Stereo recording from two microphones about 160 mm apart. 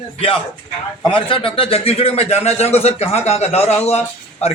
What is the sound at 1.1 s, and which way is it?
A man's voice, 35° left (ahead or behind).